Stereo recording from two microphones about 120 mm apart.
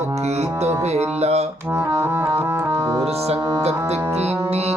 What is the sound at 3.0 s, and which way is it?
Music, 60° right (ahead or behind).